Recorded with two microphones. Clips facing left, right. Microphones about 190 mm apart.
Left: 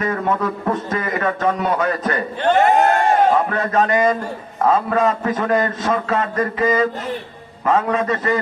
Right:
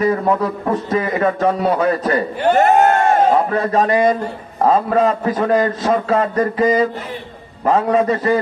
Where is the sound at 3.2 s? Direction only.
35° right (ahead or behind).